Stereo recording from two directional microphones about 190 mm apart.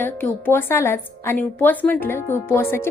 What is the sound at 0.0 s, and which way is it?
Speech, 10° left (ahead or behind).